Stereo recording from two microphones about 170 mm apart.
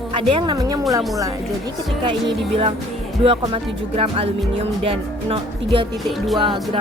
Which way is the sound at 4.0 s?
35° right (ahead or behind).